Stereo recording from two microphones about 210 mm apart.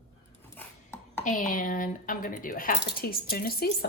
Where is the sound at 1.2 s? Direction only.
40° left (ahead or behind).